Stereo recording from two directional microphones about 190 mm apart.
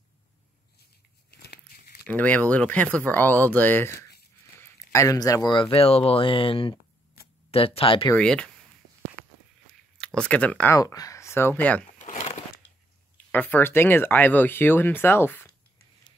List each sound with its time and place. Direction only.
1.3 s crumpling: 55° left (ahead or behind)
2.0 s speech: 5° left (ahead or behind); by 8.1 s 30° left (ahead or behind)
8.1 s speech: 5° left (ahead or behind)
9.7 s speech: 5° left (ahead or behind)
12.0 s crumpling: 35° left (ahead or behind)
13.3 s speech: 10° left (ahead or behind)